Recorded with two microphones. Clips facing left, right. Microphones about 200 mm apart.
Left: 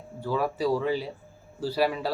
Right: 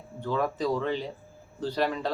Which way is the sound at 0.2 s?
10° left (ahead or behind).